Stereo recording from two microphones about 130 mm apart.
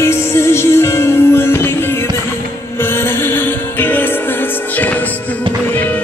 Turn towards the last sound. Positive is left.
turn(degrees=15)  # may be behind; listen again after turning